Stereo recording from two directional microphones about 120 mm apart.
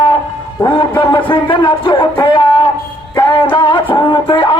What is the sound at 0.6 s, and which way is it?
Speech, 40° left (ahead or behind).